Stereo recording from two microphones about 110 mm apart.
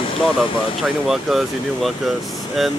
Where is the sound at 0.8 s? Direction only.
5° right (ahead or behind).